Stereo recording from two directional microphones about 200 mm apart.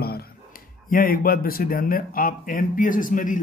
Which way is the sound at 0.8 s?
45° left (ahead or behind).